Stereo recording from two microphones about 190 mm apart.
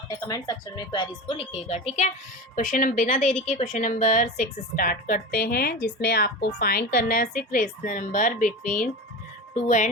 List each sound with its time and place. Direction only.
0.3 s a woman's voice: 20° left (ahead or behind); by 9.9 s 40° left (ahead or behind)